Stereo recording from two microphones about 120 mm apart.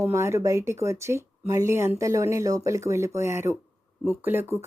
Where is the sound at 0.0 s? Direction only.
20° right (ahead or behind).